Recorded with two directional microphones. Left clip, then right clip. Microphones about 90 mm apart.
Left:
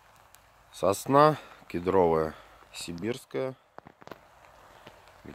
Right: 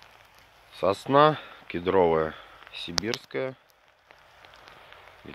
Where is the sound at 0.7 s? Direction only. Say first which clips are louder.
Right 1 dB; 55° left (ahead or behind).